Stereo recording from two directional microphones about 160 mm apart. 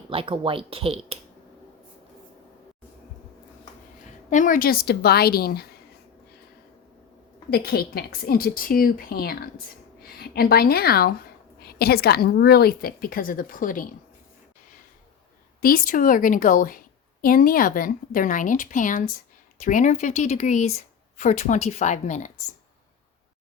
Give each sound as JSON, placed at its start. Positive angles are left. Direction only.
{"t": 0.1, "sound": "speech", "side_deg": -35}
{"t": 4.3, "sound": "a woman's voice", "side_deg": 55}
{"t": 7.5, "sound": "a woman's voice", "side_deg": 75}
{"t": 15.6, "sound": "a woman's voice", "side_deg": 60}